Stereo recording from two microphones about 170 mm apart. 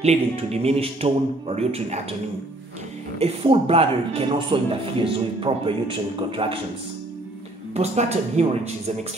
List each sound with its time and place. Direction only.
0.0 s speech: 40° right (ahead or behind)
3.2 s speech: 35° right (ahead or behind)
7.7 s speech: 40° right (ahead or behind)